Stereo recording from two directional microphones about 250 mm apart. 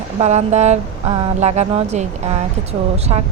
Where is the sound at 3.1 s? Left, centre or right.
Right.